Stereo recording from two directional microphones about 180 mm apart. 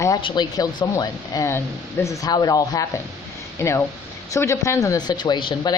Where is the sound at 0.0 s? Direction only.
25° left (ahead or behind).